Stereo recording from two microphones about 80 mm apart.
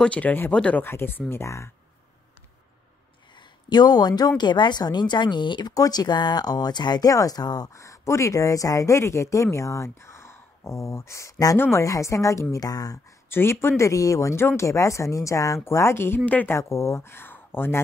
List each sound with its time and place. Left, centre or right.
0.0 s speech: centre
0.8 s speech: left
3.3 s a sound: left
4.4 s speech: left
7.7 s speech: left
11.5 s speech: left
11.8 s a woman's voice: left
13.3 s speech: left
16.5 s speech: left